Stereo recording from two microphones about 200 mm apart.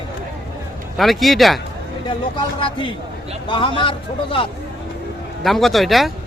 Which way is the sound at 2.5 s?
25° left (ahead or behind).